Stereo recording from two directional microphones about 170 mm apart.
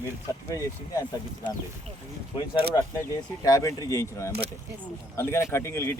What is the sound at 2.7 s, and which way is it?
Speech, 20° left (ahead or behind).